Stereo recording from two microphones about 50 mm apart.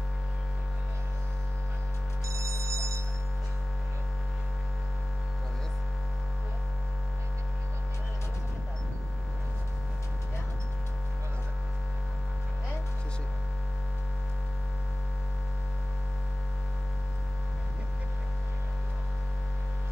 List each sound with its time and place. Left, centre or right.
2.2 s telephone bell ringing: right